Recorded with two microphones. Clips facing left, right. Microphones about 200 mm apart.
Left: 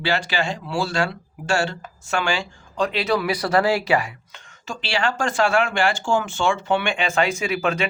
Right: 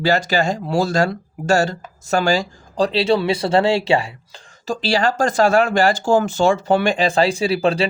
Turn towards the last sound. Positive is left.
turn(degrees=-30)  # may be behind; listen again after turning